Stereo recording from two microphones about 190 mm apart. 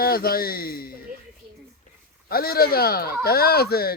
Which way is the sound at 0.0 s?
50° left (ahead or behind).